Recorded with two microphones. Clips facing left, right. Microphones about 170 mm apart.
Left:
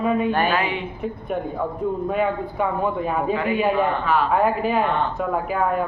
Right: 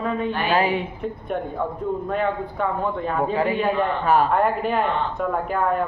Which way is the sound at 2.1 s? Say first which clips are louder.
Left 1 dB; 10° left (ahead or behind).